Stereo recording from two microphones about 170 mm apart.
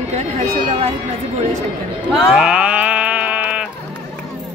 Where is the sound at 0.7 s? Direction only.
35° right (ahead or behind).